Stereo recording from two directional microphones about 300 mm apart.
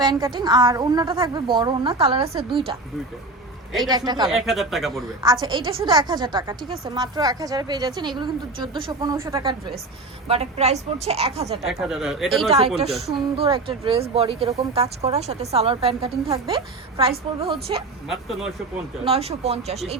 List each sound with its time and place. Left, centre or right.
0.0 s a woman's voice: centre
3.8 s a woman's voice: centre
4.3 s speech: centre
5.2 s a woman's voice: centre
11.6 s speech: centre
12.5 s speech: centre
18.1 s speech: centre
19.0 s speech: centre